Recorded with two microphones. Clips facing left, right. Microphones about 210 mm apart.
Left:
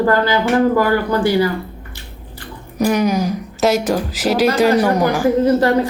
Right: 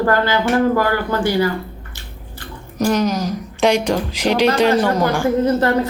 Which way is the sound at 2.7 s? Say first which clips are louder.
Left 2 dB; 10° left (ahead or behind).